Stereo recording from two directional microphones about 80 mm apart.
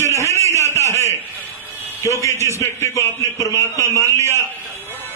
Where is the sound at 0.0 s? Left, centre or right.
Left.